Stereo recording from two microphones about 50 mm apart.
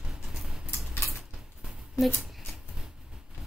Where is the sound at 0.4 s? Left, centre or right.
Centre.